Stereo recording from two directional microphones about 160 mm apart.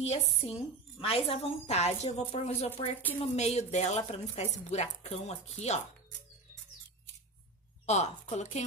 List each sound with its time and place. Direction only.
0.0 s a woman's voice: 40° left (ahead or behind)
7.8 s a woman's voice: 45° left (ahead or behind)